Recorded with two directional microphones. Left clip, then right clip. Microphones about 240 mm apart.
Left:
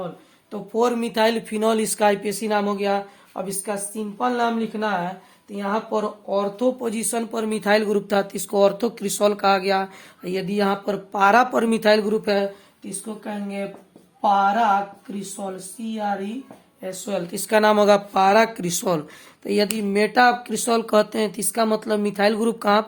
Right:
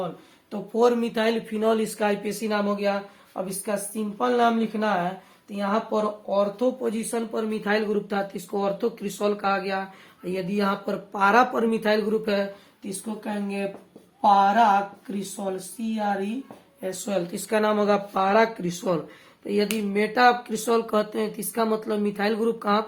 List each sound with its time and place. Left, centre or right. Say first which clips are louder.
0.5 s speech: even; left
13.1 s speech: even; centre
17.4 s speech: left 7 dB; left